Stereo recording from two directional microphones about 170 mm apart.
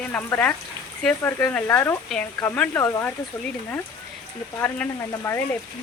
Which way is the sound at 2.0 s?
5° left (ahead or behind).